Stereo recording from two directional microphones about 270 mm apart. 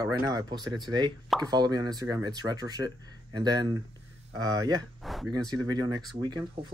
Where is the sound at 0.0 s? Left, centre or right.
Centre.